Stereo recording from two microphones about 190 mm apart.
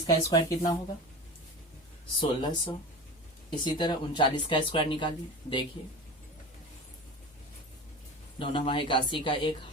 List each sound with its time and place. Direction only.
0.0 s speech: 20° left (ahead or behind)
2.2 s speech: 25° left (ahead or behind)
8.4 s speech: 25° left (ahead or behind)